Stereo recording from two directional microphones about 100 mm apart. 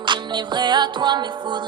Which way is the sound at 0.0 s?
50° right (ahead or behind).